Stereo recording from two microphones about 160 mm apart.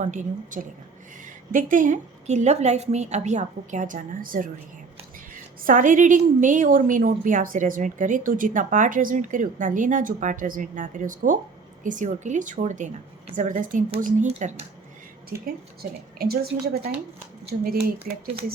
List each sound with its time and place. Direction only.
0.0 s a woman's voice: 50° right (ahead or behind)
15.3 s a woman's voice: 70° right (ahead or behind)
18.1 s a woman's voice: 60° right (ahead or behind)